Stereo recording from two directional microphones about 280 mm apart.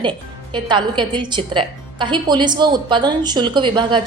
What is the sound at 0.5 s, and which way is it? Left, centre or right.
A woman's voice, centre.